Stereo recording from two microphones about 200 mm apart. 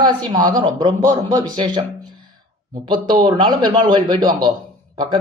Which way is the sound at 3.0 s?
25° right (ahead or behind).